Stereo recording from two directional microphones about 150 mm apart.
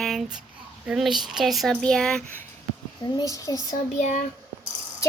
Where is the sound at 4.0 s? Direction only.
50° left (ahead or behind).